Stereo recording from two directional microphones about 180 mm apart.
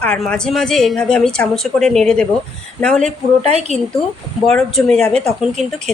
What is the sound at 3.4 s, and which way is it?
Speech, 35° right (ahead or behind).